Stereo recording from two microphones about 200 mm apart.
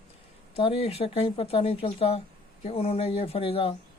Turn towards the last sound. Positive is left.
turn(degrees=25)  # may be behind; listen again after turning